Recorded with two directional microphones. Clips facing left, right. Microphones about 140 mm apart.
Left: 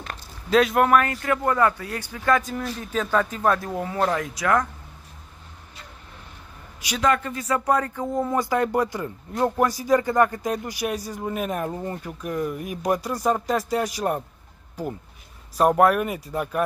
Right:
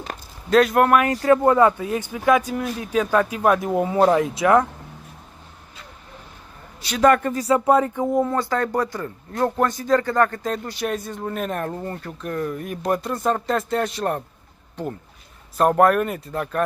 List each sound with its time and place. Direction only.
0.5 s speech: centre (ahead or behind)
1.1 s speech: 30° right (ahead or behind)
7.0 s speech: 45° right (ahead or behind)
7.4 s speech: 25° right (ahead or behind)
8.3 s speech: 15° left (ahead or behind)